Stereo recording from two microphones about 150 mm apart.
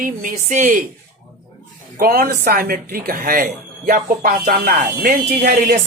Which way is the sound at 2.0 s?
85° right.